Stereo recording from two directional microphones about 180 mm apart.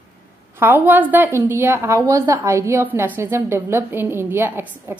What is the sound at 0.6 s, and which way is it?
A woman's voice, 10° right (ahead or behind).